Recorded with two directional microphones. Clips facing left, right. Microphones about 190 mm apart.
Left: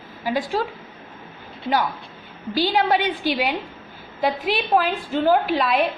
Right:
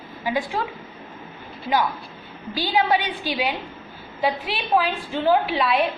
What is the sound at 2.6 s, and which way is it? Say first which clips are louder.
A woman's voice: left 1 dB; 45° left (ahead or behind).